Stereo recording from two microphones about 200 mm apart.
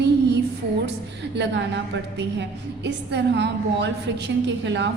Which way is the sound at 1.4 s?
60° right (ahead or behind).